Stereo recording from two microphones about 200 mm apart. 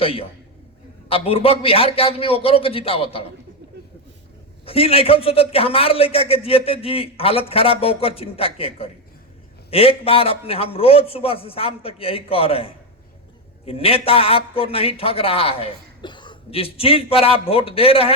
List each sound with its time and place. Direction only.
0.0 s a man's voice: 30° left (ahead or behind)
4.6 s a man's voice: 30° left (ahead or behind)